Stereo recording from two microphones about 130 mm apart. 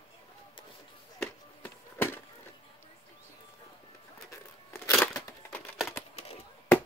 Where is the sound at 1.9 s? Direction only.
15° left (ahead or behind).